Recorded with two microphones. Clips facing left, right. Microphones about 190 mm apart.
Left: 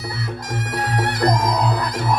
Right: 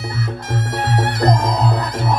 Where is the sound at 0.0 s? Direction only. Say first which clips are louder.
Right 3 dB; 25° right (ahead or behind).